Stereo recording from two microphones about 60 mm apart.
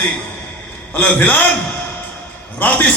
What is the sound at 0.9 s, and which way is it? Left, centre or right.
Speech, left.